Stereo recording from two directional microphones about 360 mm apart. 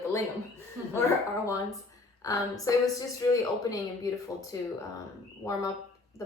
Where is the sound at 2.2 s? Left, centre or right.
Centre.